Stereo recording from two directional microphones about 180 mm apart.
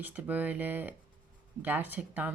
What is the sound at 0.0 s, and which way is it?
Speech, 10° right (ahead or behind).